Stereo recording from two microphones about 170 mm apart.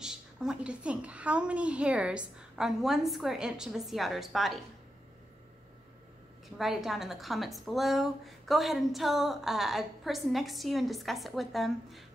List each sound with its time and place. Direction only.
0.0 s a woman's voice: 5° right (ahead or behind)
6.6 s a woman's voice: centre (ahead or behind)